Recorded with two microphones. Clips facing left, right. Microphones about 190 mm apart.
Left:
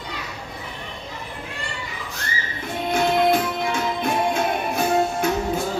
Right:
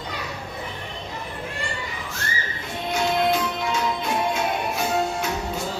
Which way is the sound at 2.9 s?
55° left (ahead or behind).